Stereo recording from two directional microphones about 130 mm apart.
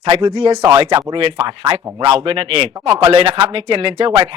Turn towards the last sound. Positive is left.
turn(degrees=-40)  # may be behind; listen again after turning